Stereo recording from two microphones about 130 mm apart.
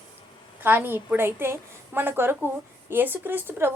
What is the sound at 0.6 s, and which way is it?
A woman's voice, 15° right (ahead or behind).